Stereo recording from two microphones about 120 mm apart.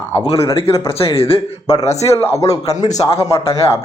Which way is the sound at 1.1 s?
55° left (ahead or behind).